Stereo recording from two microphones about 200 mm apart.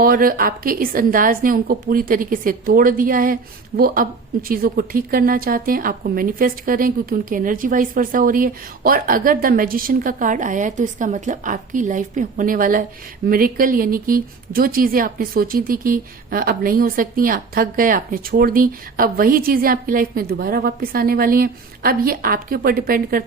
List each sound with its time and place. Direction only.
0.0 s a woman's voice: 45° right (ahead or behind)